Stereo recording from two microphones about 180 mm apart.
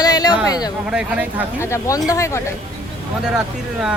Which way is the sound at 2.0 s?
15° left (ahead or behind).